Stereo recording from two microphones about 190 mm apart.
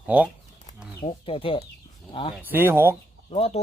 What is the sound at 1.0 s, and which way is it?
Speech, 30° left (ahead or behind).